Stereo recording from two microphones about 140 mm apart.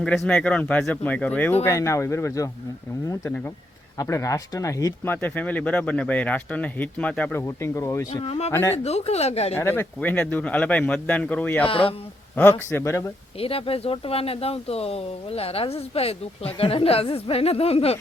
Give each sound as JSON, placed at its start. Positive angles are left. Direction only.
{"t": 0.0, "sound": "speech", "side_deg": 5}
{"t": 5.1, "sound": "speech", "side_deg": 10}
{"t": 7.3, "sound": "speech", "side_deg": 20}
{"t": 8.2, "sound": "speech", "side_deg": 50}
{"t": 9.6, "sound": "speech", "side_deg": 15}
{"t": 11.6, "sound": "a man's voice", "side_deg": 40}
{"t": 12.4, "sound": "speech", "side_deg": 15}
{"t": 13.4, "sound": "speech", "side_deg": 45}